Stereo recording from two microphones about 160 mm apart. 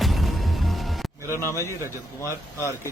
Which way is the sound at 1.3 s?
15° left (ahead or behind).